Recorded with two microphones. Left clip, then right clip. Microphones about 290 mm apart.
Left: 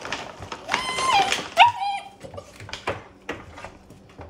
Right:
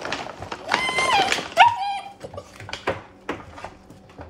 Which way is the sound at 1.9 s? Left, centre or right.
Centre.